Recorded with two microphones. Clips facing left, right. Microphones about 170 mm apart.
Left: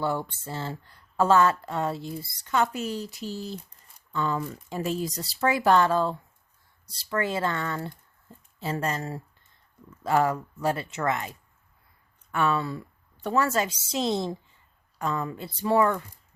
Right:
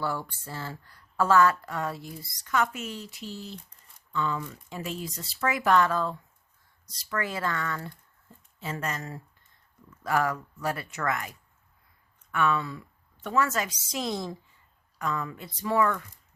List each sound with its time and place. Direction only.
0.0 s speech: 25° left (ahead or behind)